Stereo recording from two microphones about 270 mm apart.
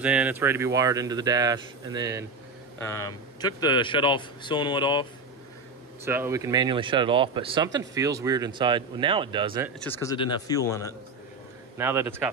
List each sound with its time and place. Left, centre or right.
0.0 s speech: centre
2.8 s a man's voice: centre
6.0 s speech: centre
9.8 s a man's voice: centre
11.8 s speech: centre